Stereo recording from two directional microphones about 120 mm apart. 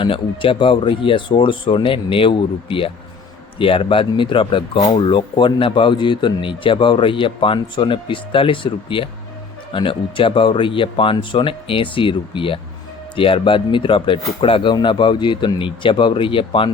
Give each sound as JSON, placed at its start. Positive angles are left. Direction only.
{"t": 0.0, "sound": "speech", "side_deg": 45}